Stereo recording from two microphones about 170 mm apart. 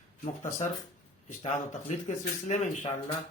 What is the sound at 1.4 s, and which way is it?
Speech, 45° left (ahead or behind).